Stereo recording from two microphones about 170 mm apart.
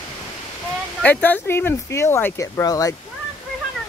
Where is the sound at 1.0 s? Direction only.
10° left (ahead or behind).